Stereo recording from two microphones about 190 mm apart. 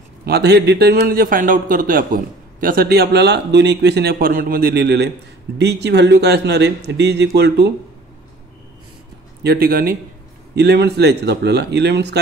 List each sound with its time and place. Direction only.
0.2 s a man's voice: 60° right (ahead or behind)
9.4 s a man's voice: 55° right (ahead or behind)